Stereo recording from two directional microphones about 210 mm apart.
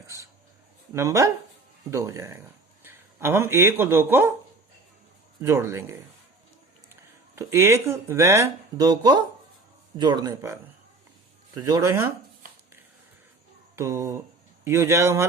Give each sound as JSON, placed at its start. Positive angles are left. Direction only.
{"t": 0.9, "sound": "speech", "side_deg": -15}
{"t": 5.4, "sound": "speech", "side_deg": -10}
{"t": 7.3, "sound": "speech", "side_deg": -10}
{"t": 13.7, "sound": "speech", "side_deg": -10}